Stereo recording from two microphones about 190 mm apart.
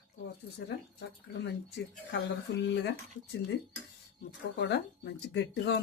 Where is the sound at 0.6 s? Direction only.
60° left (ahead or behind).